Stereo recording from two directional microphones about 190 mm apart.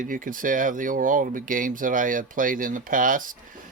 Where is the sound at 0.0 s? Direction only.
45° right (ahead or behind).